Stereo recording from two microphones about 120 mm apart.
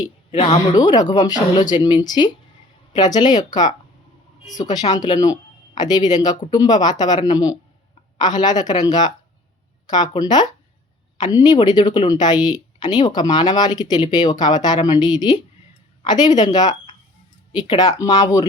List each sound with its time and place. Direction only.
0.3 s a woman's voice: 65° left (ahead or behind)
0.7 s speech: 30° left (ahead or behind)